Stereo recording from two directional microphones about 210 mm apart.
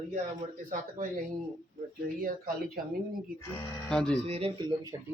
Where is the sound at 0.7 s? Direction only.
40° right (ahead or behind).